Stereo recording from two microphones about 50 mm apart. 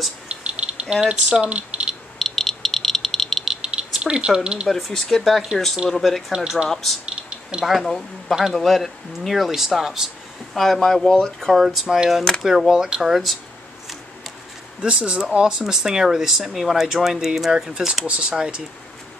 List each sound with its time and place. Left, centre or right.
0.3 s a sound: right
1.0 s speech: right
2.1 s rattle: centre
4.0 s speech: centre
4.6 s speech: centre
6.3 s speech: centre
6.7 s speech: centre
10.5 s speech: centre
11.5 s speech: centre
14.8 s speech: centre
18.0 s speech: right